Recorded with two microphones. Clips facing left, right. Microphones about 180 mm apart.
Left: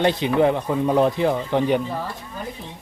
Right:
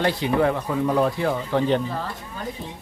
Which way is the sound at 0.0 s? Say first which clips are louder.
Left 3 dB; 20° left (ahead or behind).